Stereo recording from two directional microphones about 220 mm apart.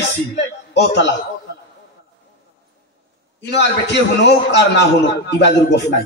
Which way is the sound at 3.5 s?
50° left (ahead or behind).